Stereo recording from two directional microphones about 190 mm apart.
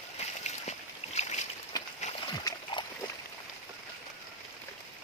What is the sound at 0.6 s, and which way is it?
Boat, 35° left (ahead or behind).